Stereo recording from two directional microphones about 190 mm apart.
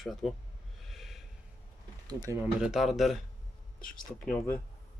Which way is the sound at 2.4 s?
5° right (ahead or behind).